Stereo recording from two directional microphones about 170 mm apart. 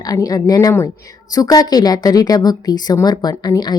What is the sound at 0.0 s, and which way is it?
Speech, 20° left (ahead or behind).